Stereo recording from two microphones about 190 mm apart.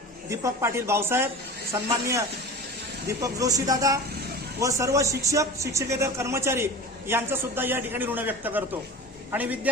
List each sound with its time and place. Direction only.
0.3 s speech: 15° right (ahead or behind)
3.1 s speech: 15° right (ahead or behind)